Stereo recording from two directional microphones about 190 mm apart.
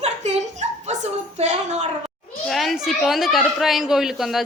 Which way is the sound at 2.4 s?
Centre (ahead or behind).